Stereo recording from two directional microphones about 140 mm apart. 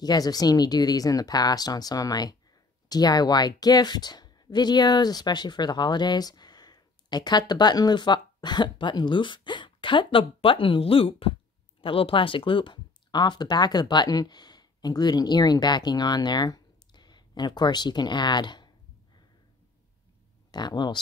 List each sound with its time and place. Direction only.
0.0 s speech: 30° left (ahead or behind)
20.5 s speech: 30° left (ahead or behind)